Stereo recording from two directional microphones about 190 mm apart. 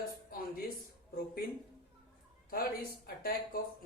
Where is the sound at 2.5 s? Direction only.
50° left (ahead or behind).